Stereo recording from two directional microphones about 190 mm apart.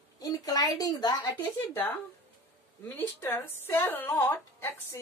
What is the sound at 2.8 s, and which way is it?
A woman's voice, 10° left (ahead or behind).